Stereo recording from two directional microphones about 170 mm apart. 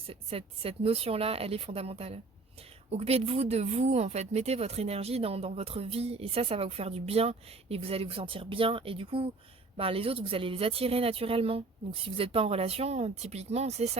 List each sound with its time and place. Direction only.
0.1 s a woman's voice: 35° right (ahead or behind)